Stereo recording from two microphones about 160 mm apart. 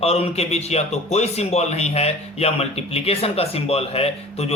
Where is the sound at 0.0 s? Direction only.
40° left (ahead or behind).